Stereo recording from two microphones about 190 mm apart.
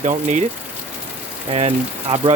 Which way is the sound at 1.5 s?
30° right (ahead or behind).